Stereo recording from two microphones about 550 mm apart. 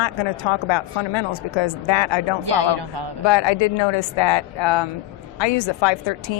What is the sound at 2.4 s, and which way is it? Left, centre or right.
Speech, right.